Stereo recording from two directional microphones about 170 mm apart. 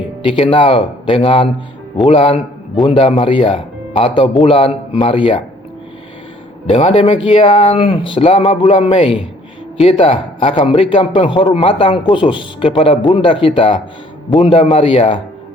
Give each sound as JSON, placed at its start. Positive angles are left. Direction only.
{"t": 0.3, "sound": "a man's voice", "side_deg": 30}
{"t": 6.7, "sound": "a man's voice", "side_deg": 35}